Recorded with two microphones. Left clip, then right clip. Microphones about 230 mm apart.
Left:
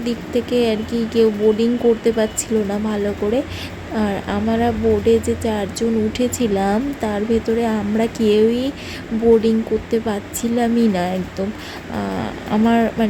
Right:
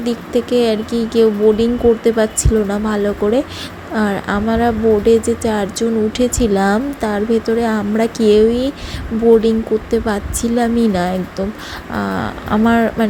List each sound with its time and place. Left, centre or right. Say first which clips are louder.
0.0 s speech: right 4 dB; centre